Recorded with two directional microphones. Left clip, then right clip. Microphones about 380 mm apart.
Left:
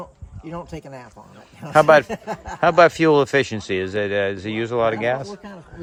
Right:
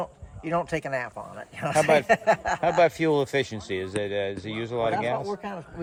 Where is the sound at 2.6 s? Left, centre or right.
Left.